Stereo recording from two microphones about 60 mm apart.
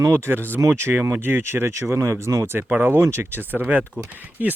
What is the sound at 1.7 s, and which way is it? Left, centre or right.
Speech, right.